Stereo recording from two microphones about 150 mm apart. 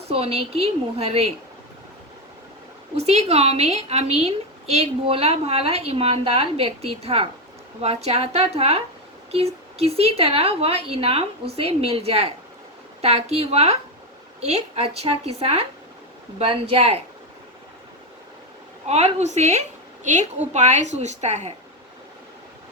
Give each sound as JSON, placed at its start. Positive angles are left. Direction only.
{"t": 0.1, "sound": "a woman's voice", "side_deg": -40}
{"t": 2.9, "sound": "a woman's voice", "side_deg": -45}
{"t": 18.9, "sound": "a woman's voice", "side_deg": -45}